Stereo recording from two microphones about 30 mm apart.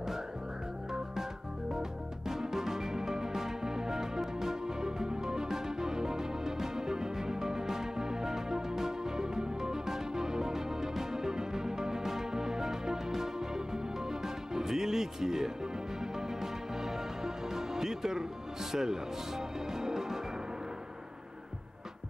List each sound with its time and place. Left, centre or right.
1.7 s music: centre